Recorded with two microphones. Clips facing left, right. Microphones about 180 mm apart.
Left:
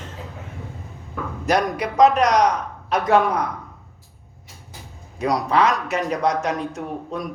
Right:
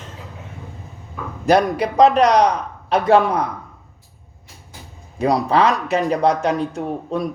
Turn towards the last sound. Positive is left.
turn(degrees=-30)  # may be behind; listen again after turning